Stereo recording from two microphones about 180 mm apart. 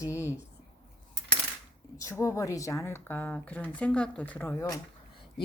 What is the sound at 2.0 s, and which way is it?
Speech, 15° left (ahead or behind).